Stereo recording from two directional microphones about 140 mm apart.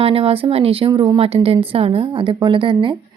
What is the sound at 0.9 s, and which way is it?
A woman's voice, 30° right (ahead or behind).